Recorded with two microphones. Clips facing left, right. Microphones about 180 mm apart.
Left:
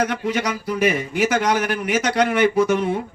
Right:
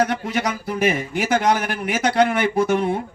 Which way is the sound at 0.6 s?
50° right (ahead or behind).